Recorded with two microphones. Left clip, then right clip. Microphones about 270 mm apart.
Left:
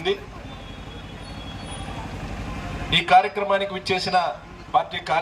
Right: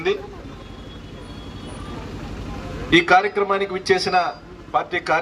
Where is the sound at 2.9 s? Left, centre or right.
Right.